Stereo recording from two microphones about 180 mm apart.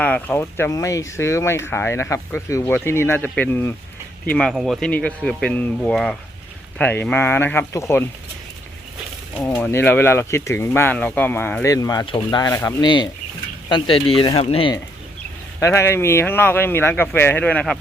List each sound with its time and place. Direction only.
0.0 s speech: 10° left (ahead or behind)
9.6 s speech: 10° left (ahead or behind); by 14.7 s 30° left (ahead or behind)
15.6 s speech: 15° left (ahead or behind)